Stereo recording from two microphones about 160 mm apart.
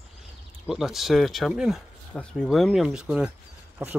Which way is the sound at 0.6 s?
5° right (ahead or behind).